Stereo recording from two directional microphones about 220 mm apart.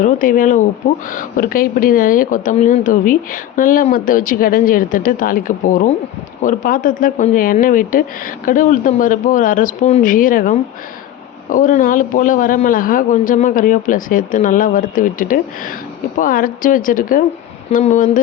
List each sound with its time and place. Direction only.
0.0 s speech: 40° left (ahead or behind)